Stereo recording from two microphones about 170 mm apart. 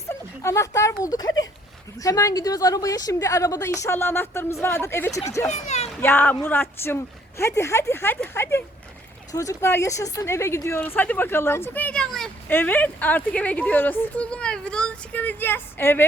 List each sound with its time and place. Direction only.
0.1 s a woman's voice: 15° left (ahead or behind)
5.5 s speech: 45° left (ahead or behind)
6.0 s speech: 10° left (ahead or behind)